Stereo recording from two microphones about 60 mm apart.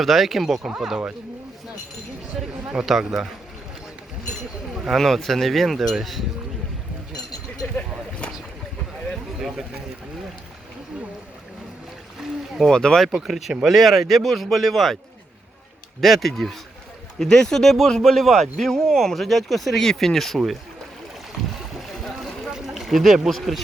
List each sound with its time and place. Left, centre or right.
0.0 s speech: centre
2.7 s speech: centre
4.7 s speech: centre
12.7 s speech: centre
13.1 s speech: centre
16.0 s speech: centre
21.5 s boat: centre
22.4 s speech: centre